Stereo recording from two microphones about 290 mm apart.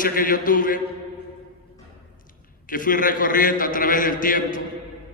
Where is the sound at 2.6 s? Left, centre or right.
Left.